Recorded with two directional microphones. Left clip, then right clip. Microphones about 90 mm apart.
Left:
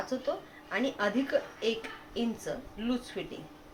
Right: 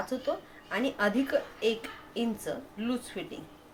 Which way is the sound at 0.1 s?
35° right (ahead or behind).